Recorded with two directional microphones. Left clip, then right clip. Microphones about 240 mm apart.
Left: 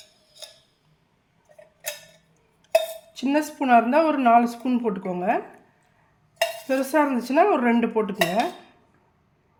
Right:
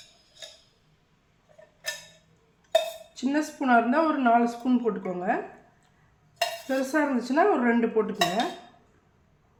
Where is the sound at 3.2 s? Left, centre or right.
Left.